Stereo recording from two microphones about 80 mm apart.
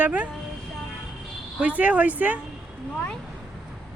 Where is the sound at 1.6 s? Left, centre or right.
Centre.